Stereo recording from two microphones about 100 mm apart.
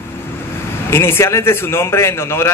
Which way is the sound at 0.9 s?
25° left (ahead or behind).